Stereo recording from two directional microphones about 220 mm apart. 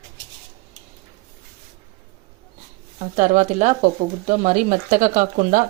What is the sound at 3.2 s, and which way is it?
Speech, 35° right (ahead or behind).